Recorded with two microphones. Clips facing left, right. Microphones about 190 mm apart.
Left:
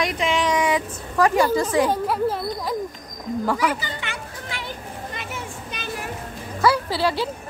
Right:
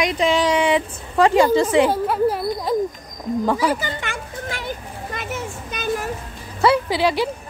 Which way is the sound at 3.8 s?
45° right (ahead or behind).